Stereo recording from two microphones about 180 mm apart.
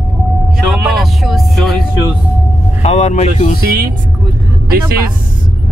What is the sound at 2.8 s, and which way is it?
Speech, 40° left (ahead or behind).